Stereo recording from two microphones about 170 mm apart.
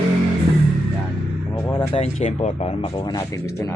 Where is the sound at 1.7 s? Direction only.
25° left (ahead or behind).